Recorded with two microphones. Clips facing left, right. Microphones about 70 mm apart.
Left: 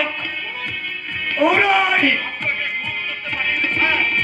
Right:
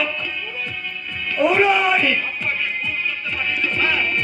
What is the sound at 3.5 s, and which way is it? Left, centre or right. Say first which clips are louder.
Music: left 2 dB; left.